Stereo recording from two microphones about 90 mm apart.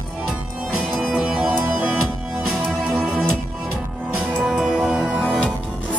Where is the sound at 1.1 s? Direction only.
10° right (ahead or behind).